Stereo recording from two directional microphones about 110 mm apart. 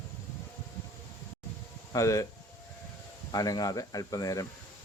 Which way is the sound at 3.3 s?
35° left (ahead or behind).